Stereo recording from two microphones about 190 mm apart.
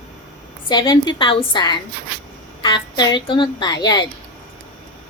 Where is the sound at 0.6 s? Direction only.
25° left (ahead or behind).